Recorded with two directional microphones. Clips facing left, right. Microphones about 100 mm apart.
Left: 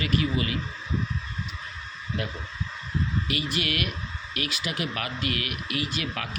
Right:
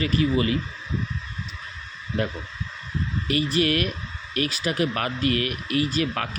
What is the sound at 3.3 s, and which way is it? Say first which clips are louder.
Speech: right 7 dB; 40° right (ahead or behind).